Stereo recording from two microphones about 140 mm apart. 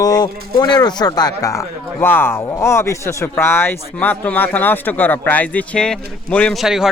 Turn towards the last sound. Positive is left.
turn(degrees=-5)  # may be behind; listen again after turning